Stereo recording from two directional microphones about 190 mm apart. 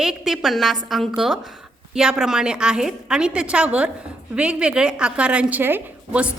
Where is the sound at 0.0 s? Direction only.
Centre (ahead or behind).